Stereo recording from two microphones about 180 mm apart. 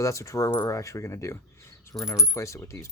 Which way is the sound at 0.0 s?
15° left (ahead or behind).